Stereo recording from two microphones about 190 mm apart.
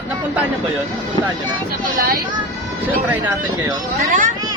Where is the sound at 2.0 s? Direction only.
50° right (ahead or behind).